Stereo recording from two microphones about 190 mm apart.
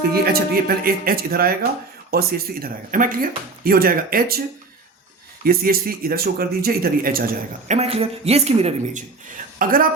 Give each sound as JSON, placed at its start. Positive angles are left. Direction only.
{"t": 0.1, "sound": "speech", "side_deg": -55}
{"t": 5.5, "sound": "speech", "side_deg": -50}
{"t": 7.7, "sound": "a woman's voice", "side_deg": -35}
{"t": 9.6, "sound": "a woman's voice", "side_deg": -45}